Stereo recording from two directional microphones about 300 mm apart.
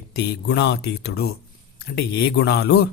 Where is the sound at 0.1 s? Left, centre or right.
Left.